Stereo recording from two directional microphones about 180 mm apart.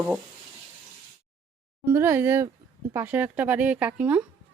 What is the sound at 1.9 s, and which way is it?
Speech, 15° right (ahead or behind).